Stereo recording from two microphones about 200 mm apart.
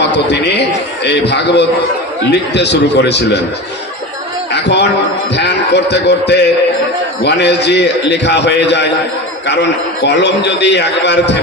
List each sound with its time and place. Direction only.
0.3 s a man's voice: 55° left (ahead or behind)
4.5 s a sound: 60° left (ahead or behind)
5.3 s a man's voice: 60° left (ahead or behind)